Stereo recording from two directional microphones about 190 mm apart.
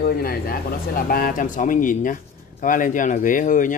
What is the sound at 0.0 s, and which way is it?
Speech, 50° left (ahead or behind).